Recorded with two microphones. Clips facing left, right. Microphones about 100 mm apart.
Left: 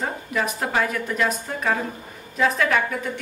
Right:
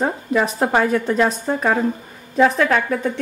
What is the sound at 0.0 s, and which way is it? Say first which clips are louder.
A woman's voice: right 6 dB; 30° right (ahead or behind).